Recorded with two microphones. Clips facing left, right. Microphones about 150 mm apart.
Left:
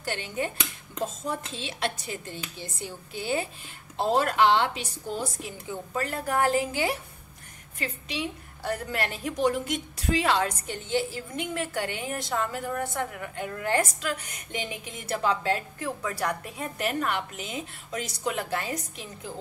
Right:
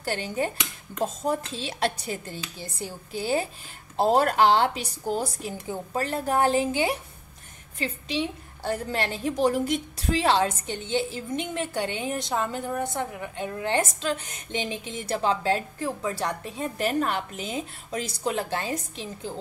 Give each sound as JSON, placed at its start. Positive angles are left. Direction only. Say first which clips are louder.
{"t": 0.0, "sound": "a woman's voice", "louder": "right 3 dB", "side_deg": -35}